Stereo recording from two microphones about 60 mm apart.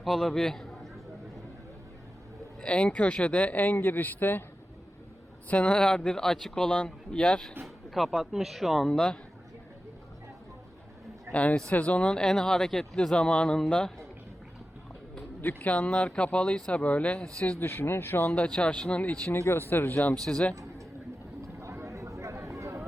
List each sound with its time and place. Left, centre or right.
0.0 s speech: centre
2.6 s speech: centre; by 4.4 s left
5.5 s speech: centre
7.6 s speech: centre
8.9 s speech: centre
11.3 s speech: centre
15.4 s speech: left
17.6 s speech: left
18.2 s speech: left
18.4 s speech: centre
19.7 s speech: left
20.2 s speech: centre
21.6 s a sound: right